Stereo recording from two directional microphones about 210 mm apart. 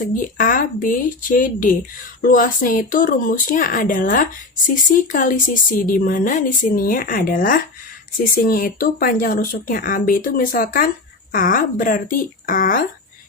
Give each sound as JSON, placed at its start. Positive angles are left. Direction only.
{"t": 0.0, "sound": "speech", "side_deg": 40}